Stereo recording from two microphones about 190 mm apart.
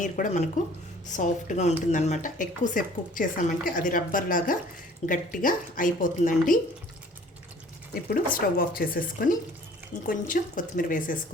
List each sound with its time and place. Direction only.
0.0 s a woman's voice: 40° left (ahead or behind)
8.1 s a woman's voice: 50° left (ahead or behind)